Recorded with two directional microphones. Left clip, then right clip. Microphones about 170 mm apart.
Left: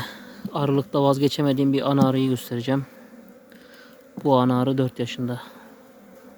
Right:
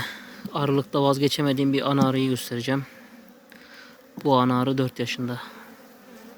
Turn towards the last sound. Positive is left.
turn(degrees=25)  # may be behind; listen again after turning